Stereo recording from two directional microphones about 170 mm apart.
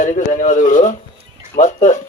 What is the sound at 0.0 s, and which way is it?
A man's voice, 45° left (ahead or behind).